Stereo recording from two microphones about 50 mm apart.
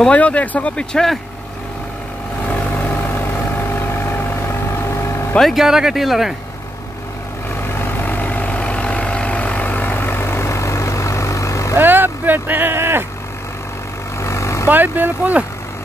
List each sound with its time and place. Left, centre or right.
0.1 s speech: left
0.7 s speech: centre
3.6 s vehicle: left
5.4 s speech: centre
7.6 s vehicle: left
11.7 s vehicle: right
14.2 s vehicle: left
14.7 s speech: right